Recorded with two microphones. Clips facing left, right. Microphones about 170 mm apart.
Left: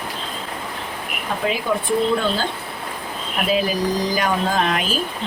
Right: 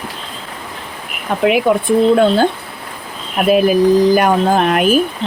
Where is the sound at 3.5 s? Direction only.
55° right (ahead or behind).